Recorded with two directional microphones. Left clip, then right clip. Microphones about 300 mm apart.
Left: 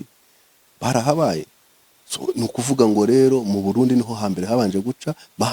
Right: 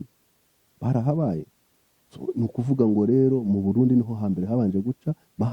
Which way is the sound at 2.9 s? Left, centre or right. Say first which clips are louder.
Left 5 dB; centre.